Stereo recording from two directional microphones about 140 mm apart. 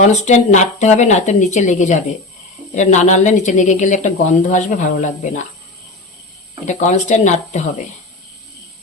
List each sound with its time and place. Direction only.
0.0 s speech: 55° left (ahead or behind)
6.7 s speech: 60° left (ahead or behind)